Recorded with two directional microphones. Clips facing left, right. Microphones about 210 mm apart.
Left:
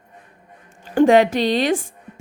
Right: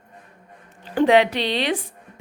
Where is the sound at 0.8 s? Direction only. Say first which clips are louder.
Left 3 dB; 45° left (ahead or behind).